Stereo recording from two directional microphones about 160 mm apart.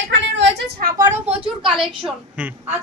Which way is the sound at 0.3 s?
70° right (ahead or behind).